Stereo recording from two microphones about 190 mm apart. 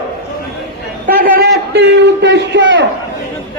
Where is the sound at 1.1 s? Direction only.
55° right (ahead or behind).